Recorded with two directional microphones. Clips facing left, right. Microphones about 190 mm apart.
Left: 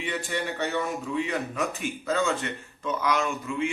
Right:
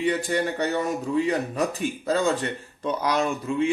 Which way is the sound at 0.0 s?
40° right (ahead or behind).